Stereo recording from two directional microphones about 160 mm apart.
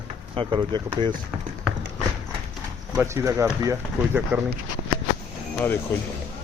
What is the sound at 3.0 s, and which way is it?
Speech, 15° right (ahead or behind).